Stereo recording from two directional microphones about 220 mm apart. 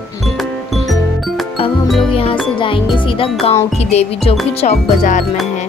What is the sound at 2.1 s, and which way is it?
Music, 25° left (ahead or behind).